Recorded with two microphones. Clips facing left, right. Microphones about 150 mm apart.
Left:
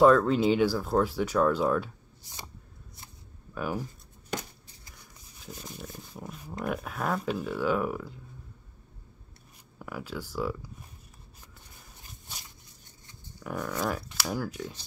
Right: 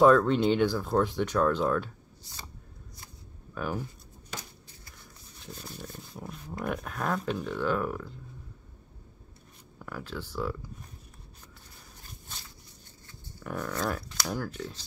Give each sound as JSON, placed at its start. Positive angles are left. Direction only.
{"t": 0.0, "sound": "speech", "side_deg": 0}
{"t": 3.5, "sound": "speech", "side_deg": 5}
{"t": 5.4, "sound": "dog", "side_deg": 5}
{"t": 5.7, "sound": "speech", "side_deg": 5}
{"t": 9.8, "sound": "speech", "side_deg": 5}
{"t": 12.3, "sound": "a sound", "side_deg": 15}
{"t": 13.4, "sound": "speech", "side_deg": 5}